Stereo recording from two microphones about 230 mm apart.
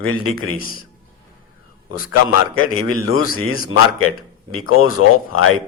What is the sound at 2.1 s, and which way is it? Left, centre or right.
Speech, left.